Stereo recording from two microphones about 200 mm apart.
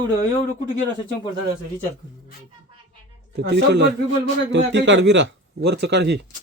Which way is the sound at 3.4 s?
55° right (ahead or behind).